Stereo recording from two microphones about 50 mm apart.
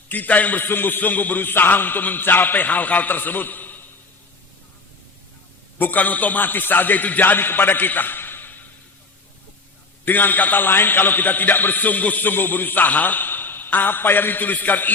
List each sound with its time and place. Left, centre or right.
0.1 s a man's voice: left
5.8 s a man's voice: left
10.1 s a man's voice: left